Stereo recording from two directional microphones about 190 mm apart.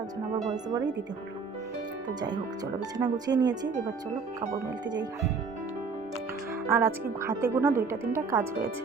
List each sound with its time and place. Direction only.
0.5 s speech: 20° right (ahead or behind)
3.0 s speech: 20° right (ahead or behind)
4.9 s speech: 20° right (ahead or behind)
6.7 s speech: 15° right (ahead or behind)